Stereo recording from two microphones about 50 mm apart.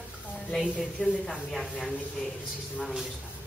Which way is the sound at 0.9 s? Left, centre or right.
Left.